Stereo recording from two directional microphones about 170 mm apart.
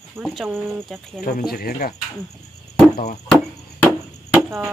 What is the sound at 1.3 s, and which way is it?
Speech, 60° left (ahead or behind).